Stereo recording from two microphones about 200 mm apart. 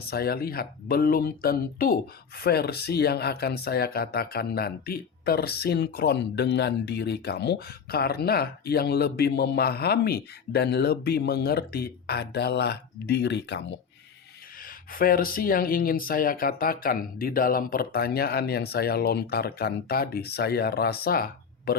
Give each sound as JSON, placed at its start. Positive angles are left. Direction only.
{"t": 0.1, "sound": "speech", "side_deg": 50}
{"t": 14.9, "sound": "speech", "side_deg": 45}